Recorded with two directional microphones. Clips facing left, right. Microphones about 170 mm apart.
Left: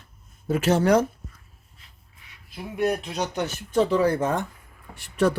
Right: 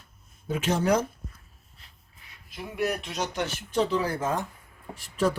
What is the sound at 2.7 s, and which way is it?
Speech, 30° left (ahead or behind).